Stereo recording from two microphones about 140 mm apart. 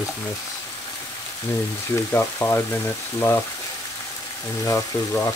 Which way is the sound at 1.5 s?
20° left (ahead or behind).